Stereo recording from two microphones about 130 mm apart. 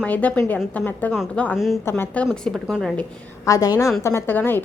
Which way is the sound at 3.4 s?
25° left (ahead or behind).